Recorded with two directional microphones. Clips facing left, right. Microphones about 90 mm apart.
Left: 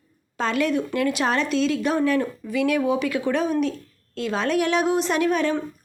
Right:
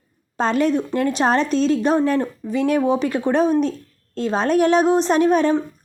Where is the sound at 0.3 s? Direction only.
35° right (ahead or behind).